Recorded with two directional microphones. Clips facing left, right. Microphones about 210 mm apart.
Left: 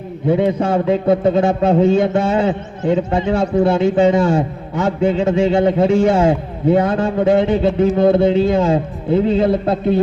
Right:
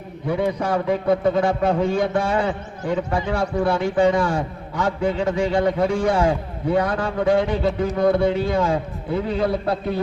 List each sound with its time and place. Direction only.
0.3 s a man's voice: 25° left (ahead or behind)